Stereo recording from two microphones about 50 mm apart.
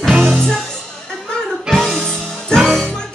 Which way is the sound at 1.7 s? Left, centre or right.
Centre.